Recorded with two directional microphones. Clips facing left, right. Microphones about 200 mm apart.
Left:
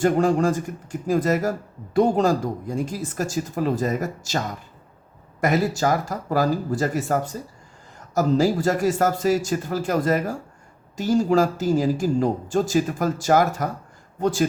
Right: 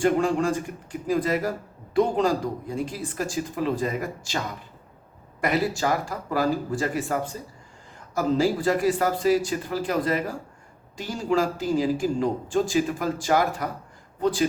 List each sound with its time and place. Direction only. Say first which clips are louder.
0.0 s a man's voice: left 3 dB; 40° left (ahead or behind)